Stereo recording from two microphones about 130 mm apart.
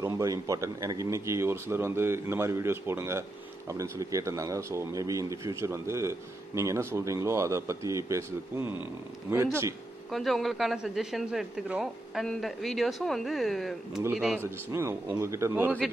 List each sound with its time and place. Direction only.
0.0 s speech: 25° right (ahead or behind)
10.1 s speech: centre (ahead or behind)
14.4 s a man's voice: 20° right (ahead or behind)